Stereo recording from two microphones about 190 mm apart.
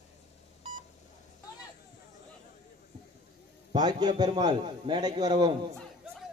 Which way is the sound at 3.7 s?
20° right (ahead or behind).